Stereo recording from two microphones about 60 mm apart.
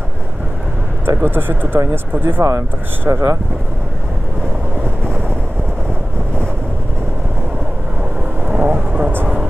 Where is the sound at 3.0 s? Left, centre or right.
Right.